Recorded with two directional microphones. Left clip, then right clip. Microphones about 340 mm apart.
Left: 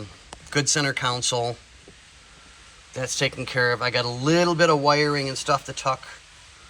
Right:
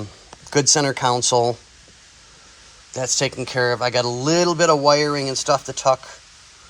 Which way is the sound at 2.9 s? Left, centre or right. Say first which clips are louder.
Right 4 dB; centre.